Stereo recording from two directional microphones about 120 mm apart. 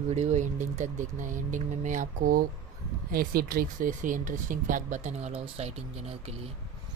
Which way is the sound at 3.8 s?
90° right.